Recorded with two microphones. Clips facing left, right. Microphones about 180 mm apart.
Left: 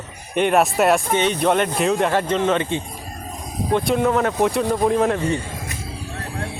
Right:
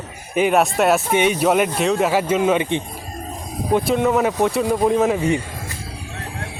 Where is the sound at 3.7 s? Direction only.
Centre (ahead or behind).